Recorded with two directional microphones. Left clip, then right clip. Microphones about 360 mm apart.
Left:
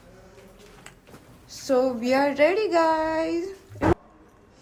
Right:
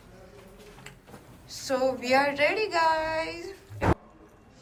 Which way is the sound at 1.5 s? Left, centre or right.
Centre.